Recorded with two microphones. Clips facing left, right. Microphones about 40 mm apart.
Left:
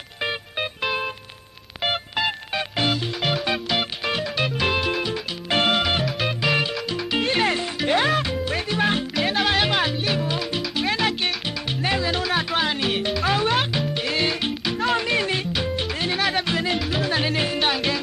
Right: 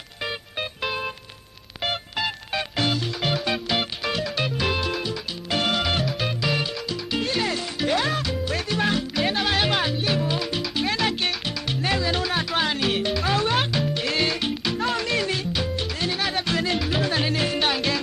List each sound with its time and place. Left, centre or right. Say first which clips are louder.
0.2 s music: left 3 dB; left
1.8 s music: left 3 dB; centre
5.5 s music: left 4 dB; left
5.8 s music: left 2 dB; centre
6.0 s music: left 2 dB; centre
6.4 s music: left 5 dB; centre
9.1 s music: left 2 dB; centre
12.1 s music: left 1 dB; centre; by 16.2 s left
16.2 s music: left 5 dB; centre
16.4 s music: left 1 dB; centre
16.7 s music: even; centre